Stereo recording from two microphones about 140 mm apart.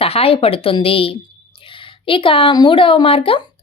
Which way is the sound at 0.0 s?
45° left (ahead or behind).